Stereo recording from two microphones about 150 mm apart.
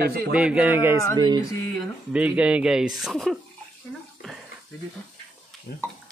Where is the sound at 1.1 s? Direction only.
30° right (ahead or behind).